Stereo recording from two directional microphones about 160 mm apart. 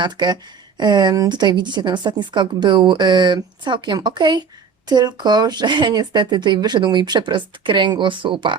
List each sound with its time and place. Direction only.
0.0 s a woman's voice: 30° right (ahead or behind)